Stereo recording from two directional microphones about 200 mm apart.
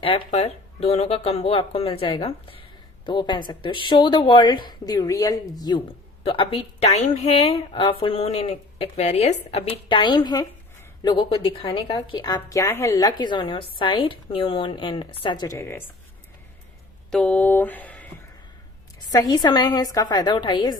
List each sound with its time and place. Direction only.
0.0 s a woman's voice: 30° left (ahead or behind); by 15.8 s 15° left (ahead or behind)
17.1 s speech: 5° left (ahead or behind)
19.1 s a woman's voice: 20° left (ahead or behind)